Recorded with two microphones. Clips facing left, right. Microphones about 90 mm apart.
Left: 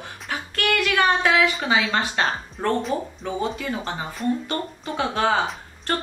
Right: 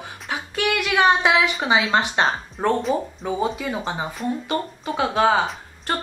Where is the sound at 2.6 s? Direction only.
10° right (ahead or behind).